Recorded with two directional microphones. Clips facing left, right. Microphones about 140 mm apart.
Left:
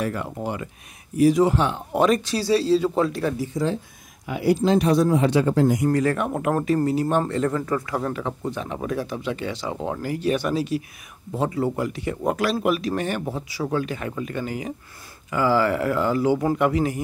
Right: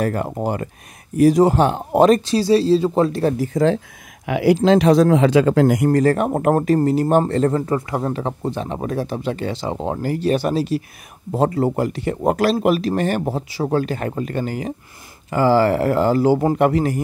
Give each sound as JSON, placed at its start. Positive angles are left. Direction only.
{"t": 0.0, "sound": "speech", "side_deg": -45}
{"t": 2.8, "sound": "speech", "side_deg": -20}
{"t": 3.1, "sound": "speech", "side_deg": -35}
{"t": 3.3, "sound": "speech", "side_deg": -90}
{"t": 5.9, "sound": "speech", "side_deg": -40}